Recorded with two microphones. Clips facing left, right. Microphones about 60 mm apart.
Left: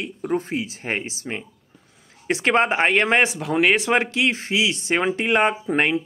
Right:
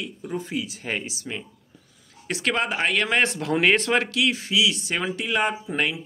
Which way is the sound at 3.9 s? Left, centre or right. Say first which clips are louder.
Left 2 dB; left.